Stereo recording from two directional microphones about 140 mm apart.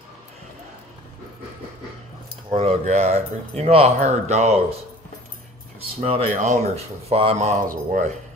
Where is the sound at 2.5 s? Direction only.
45° right (ahead or behind).